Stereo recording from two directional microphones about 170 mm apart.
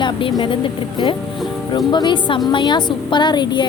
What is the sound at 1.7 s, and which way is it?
A woman's voice, 25° left (ahead or behind).